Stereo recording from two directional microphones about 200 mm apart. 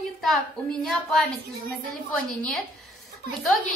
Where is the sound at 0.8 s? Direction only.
Centre (ahead or behind).